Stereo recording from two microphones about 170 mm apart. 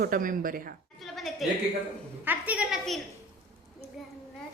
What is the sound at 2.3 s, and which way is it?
Speech, 10° right (ahead or behind).